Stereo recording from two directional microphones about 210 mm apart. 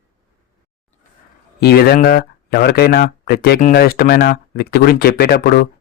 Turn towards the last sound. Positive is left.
turn(degrees=45)  # may be behind; listen again after turning